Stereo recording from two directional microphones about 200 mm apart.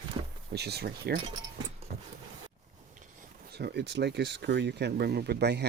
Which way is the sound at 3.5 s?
55° right (ahead or behind).